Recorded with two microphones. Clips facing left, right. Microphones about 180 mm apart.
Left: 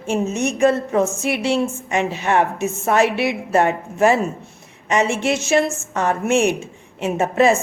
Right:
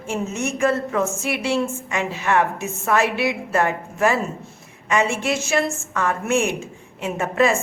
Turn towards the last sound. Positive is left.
turn(degrees=20)  # may be behind; listen again after turning